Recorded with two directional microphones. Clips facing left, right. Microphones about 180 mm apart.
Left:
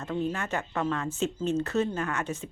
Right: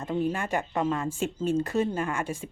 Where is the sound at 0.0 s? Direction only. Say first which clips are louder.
Right 2 dB; 15° right (ahead or behind).